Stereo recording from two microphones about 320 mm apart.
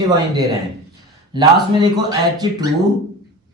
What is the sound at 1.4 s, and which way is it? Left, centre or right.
Speech, centre.